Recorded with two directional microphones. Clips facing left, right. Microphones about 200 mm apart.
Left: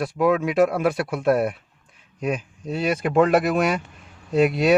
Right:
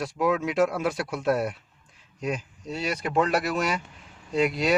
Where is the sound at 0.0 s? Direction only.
60° left (ahead or behind).